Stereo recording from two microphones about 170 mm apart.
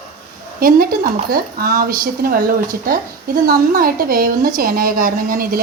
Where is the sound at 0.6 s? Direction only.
60° right (ahead or behind).